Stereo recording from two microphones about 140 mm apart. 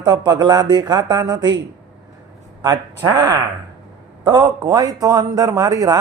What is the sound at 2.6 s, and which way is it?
A man's voice, 25° right (ahead or behind).